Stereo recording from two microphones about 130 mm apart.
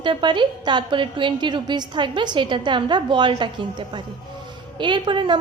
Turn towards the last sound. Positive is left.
turn(degrees=-35)  # may be behind; listen again after turning